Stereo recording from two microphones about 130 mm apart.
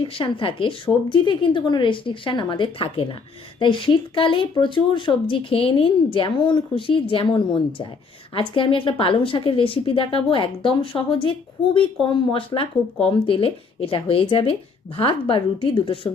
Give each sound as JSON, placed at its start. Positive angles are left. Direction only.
{"t": 0.0, "sound": "a woman's voice", "side_deg": 45}